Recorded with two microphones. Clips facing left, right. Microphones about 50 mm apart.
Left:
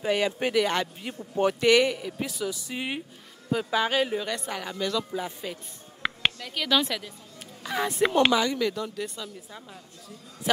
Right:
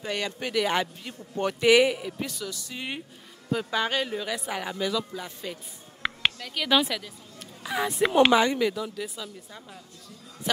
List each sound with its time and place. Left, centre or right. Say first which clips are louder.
0.0 s speech: left 6 dB; centre
0.6 s speech: even; centre
1.0 s speech: left 4 dB; centre
1.6 s speech: right 3 dB; centre
2.1 s speech: left 3 dB; centre
3.4 s a woman's voice: left 1 dB; centre
4.3 s speech: right 1 dB; centre
5.1 s speech: left 3 dB; centre
6.0 s a sound: even; centre
6.8 s a woman's voice: right 1 dB; centre
8.3 s speech: right 3 dB; right
8.5 s a woman's voice: right 1 dB; centre